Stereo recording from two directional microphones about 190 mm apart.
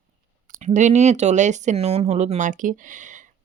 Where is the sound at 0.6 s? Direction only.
40° right (ahead or behind).